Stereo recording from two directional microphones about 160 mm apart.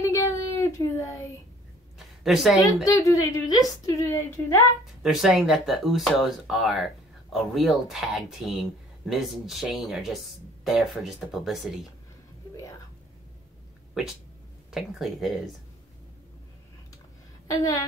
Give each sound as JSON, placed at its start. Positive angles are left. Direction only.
{"t": 0.0, "sound": "child singing", "side_deg": 20}
{"t": 2.0, "sound": "a sound", "side_deg": 0}
{"t": 2.6, "sound": "a woman's voice", "side_deg": 20}
{"t": 5.0, "sound": "speech", "side_deg": 0}
{"t": 14.7, "sound": "speech", "side_deg": 0}
{"t": 17.5, "sound": "a woman's voice", "side_deg": 20}